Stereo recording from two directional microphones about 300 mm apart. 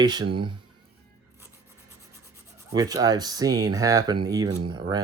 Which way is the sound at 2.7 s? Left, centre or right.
Centre.